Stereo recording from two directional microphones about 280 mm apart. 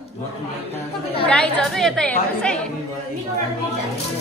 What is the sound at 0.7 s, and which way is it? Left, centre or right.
Speech, left.